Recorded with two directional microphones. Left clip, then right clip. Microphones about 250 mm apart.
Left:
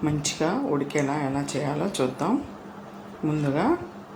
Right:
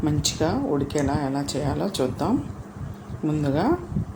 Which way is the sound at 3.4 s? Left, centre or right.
Centre.